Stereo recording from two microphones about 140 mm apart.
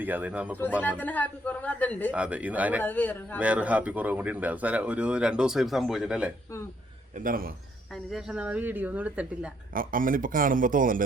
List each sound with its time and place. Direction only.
0.0 s speech: 10° right (ahead or behind)
0.8 s speech: 10° left (ahead or behind)
2.1 s speech: 10° right (ahead or behind)
2.8 s speech: 10° left (ahead or behind)
3.3 s speech: 10° right (ahead or behind)
7.2 s a man's voice: 85° right
7.9 s speech: 5° right (ahead or behind)
9.7 s speech: 80° right